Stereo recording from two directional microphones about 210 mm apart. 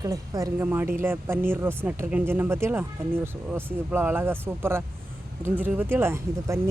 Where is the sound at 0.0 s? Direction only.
15° right (ahead or behind).